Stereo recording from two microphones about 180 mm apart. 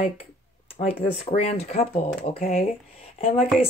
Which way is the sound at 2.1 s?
55° left (ahead or behind).